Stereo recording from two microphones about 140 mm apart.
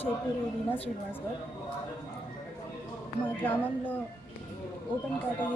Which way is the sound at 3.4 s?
10° left (ahead or behind).